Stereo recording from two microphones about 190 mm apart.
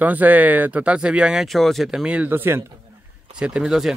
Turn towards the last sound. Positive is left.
turn(degrees=-5)  # may be behind; listen again after turning